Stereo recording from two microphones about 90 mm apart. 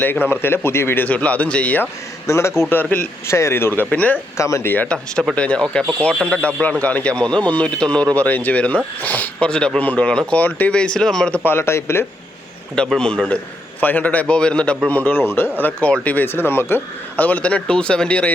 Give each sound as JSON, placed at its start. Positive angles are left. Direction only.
{"t": 0.0, "sound": "speech", "side_deg": 25}
{"t": 2.2, "sound": "a man's voice", "side_deg": 35}
{"t": 2.6, "sound": "speech", "side_deg": 20}
{"t": 3.2, "sound": "speech", "side_deg": 30}
{"t": 4.4, "sound": "speech", "side_deg": 35}
{"t": 4.7, "sound": "a man's voice", "side_deg": 15}
{"t": 11.4, "sound": "speech", "side_deg": 25}
{"t": 12.7, "sound": "a man's voice", "side_deg": 10}